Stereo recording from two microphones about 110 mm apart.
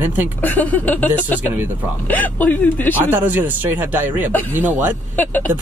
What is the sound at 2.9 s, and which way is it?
Speech, 15° right (ahead or behind).